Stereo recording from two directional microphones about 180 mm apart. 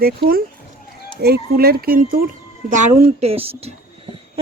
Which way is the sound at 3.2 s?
35° right (ahead or behind).